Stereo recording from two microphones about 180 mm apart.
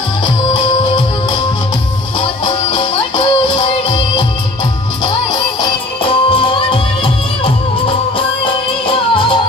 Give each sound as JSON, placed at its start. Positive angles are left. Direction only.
{"t": 0.2, "sound": "music", "side_deg": 25}
{"t": 2.1, "sound": "music", "side_deg": 25}
{"t": 5.0, "sound": "music", "side_deg": 25}
{"t": 8.8, "sound": "music", "side_deg": 30}